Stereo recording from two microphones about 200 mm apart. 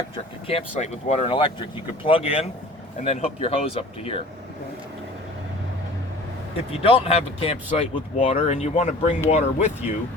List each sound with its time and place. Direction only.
0.4 s speech: 30° left (ahead or behind)
6.7 s speech: 30° left (ahead or behind)